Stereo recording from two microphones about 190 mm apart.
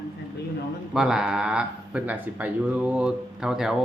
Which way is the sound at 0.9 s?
5° right (ahead or behind).